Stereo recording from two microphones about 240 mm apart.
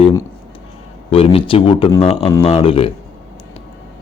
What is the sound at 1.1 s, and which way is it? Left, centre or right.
Speech, left.